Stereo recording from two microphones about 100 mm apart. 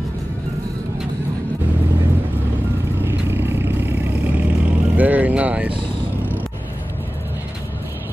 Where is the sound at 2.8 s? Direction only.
25° right (ahead or behind).